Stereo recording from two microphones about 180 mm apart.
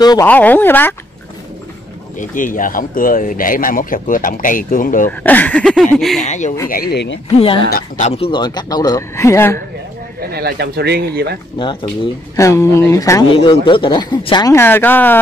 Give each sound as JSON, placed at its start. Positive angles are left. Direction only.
{"t": 0.0, "sound": "speech", "side_deg": 20}
{"t": 0.3, "sound": "speech", "side_deg": 10}
{"t": 2.1, "sound": "speech", "side_deg": 50}
{"t": 5.2, "sound": "speech", "side_deg": 10}
{"t": 6.2, "sound": "speech", "side_deg": 40}
{"t": 6.7, "sound": "speech", "side_deg": 60}
{"t": 7.3, "sound": "speech", "side_deg": 30}
{"t": 10.3, "sound": "speech", "side_deg": -60}
{"t": 11.5, "sound": "speech", "side_deg": 25}
{"t": 13.4, "sound": "speech", "side_deg": 30}